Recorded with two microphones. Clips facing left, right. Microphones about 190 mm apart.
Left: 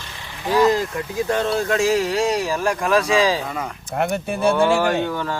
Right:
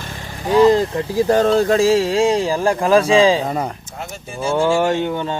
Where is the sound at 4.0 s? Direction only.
60° left (ahead or behind).